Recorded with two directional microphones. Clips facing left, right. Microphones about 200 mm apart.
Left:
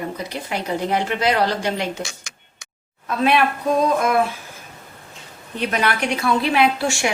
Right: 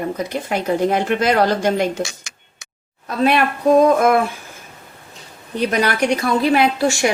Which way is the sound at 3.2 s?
40° right (ahead or behind).